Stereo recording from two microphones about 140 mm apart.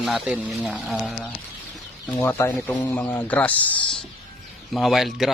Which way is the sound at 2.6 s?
10° left (ahead or behind).